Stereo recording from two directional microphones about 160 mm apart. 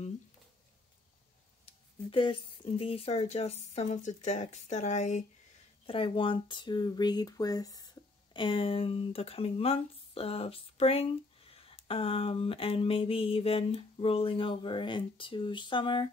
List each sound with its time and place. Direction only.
1.7 s speech: 35° left (ahead or behind)
5.9 s speech: 35° left (ahead or behind)